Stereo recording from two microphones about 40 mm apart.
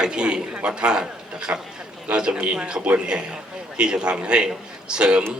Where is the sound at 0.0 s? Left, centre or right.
Right.